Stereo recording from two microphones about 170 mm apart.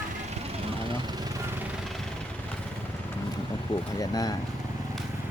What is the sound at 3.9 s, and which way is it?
Speech, 20° left (ahead or behind).